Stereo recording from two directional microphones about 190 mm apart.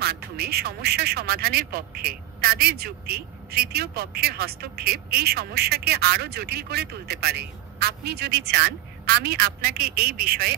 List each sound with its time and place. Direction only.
0.0 s speech: 55° right (ahead or behind)